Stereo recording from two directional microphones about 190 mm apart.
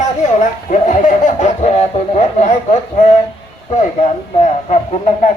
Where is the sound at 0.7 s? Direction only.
40° left (ahead or behind).